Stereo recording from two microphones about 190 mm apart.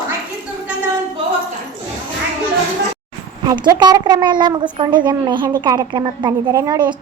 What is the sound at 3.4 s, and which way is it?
A woman's voice, 20° right (ahead or behind).